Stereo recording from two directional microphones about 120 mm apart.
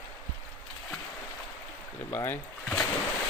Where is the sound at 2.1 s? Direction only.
15° left (ahead or behind).